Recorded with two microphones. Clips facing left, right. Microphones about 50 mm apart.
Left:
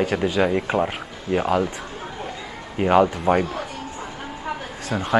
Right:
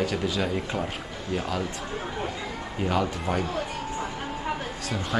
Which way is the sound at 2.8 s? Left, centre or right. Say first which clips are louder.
Left 9 dB; left.